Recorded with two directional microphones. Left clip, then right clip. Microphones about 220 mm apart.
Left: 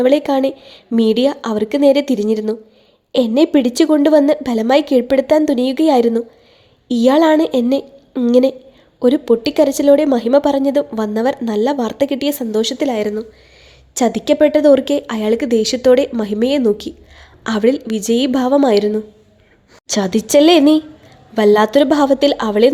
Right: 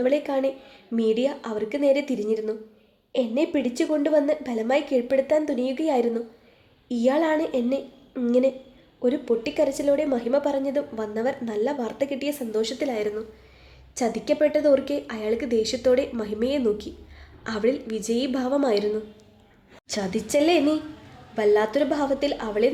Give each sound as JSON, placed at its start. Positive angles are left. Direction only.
{"t": 0.0, "sound": "speech", "side_deg": 40}